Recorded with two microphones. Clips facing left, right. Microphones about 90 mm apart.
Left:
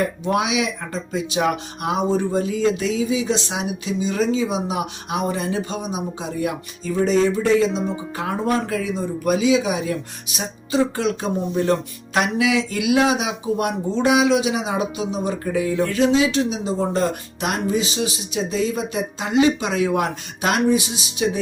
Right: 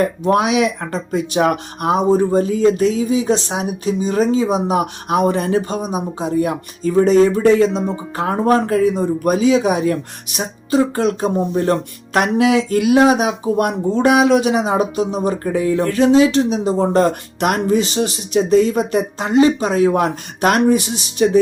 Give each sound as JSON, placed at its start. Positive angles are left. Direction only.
{"t": 0.3, "sound": "speech", "side_deg": -45}
{"t": 7.0, "sound": "speech", "side_deg": -50}